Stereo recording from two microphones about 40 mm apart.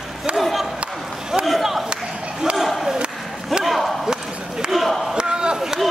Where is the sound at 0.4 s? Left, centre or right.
Centre.